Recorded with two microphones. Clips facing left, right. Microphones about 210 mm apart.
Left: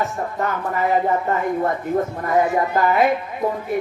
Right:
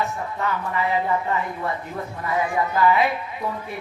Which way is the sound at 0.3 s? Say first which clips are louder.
Left 2 dB; 45° left (ahead or behind).